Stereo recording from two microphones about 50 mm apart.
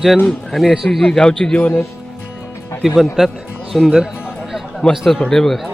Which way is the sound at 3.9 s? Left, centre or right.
Centre.